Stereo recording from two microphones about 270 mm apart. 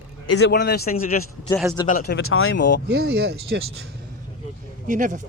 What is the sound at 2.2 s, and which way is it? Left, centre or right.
Speech, left.